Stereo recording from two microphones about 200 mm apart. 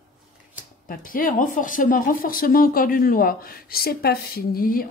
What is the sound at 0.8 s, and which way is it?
Speech, 45° left (ahead or behind).